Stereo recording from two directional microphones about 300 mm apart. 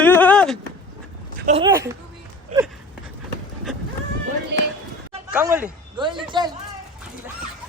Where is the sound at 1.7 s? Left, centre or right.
Centre.